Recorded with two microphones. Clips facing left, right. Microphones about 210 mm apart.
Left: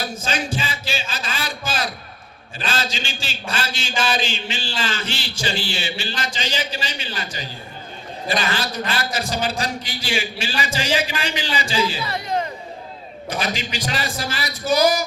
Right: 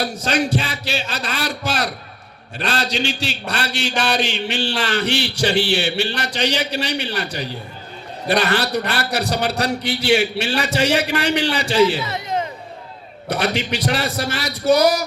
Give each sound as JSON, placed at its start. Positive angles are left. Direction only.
{"t": 0.0, "sound": "a sound", "side_deg": -65}
{"t": 2.6, "sound": "a man's voice", "side_deg": -65}
{"t": 12.0, "sound": "speech", "side_deg": -20}
{"t": 13.2, "sound": "a man's voice", "side_deg": -65}